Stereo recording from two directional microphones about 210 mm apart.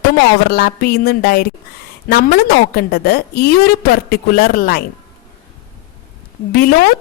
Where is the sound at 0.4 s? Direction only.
45° left (ahead or behind).